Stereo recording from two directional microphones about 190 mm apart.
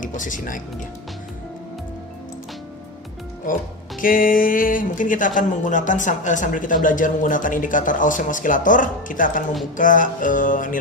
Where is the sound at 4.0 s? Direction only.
45° left (ahead or behind).